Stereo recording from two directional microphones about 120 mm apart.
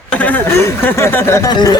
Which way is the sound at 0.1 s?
15° left (ahead or behind).